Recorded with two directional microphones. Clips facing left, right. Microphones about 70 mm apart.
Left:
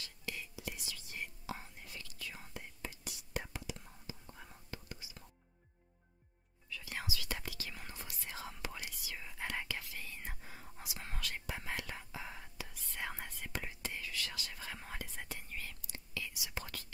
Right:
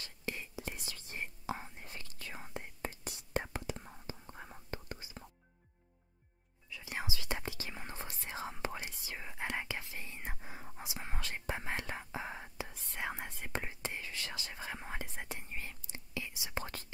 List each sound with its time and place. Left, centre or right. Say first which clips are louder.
0.0 s whispering: right 3 dB; right
6.7 s whispering: right 2 dB; right